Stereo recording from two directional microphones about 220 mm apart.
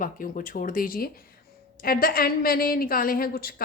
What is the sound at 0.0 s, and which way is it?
A woman's voice, 40° left (ahead or behind).